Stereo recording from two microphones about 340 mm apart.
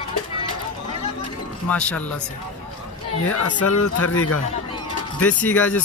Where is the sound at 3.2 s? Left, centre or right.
Left.